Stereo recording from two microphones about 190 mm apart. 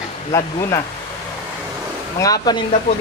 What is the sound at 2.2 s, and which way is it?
Speech, 20° left (ahead or behind).